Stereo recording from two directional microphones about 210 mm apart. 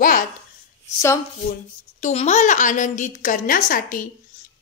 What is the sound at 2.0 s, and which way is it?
A woman's voice, 35° left (ahead or behind).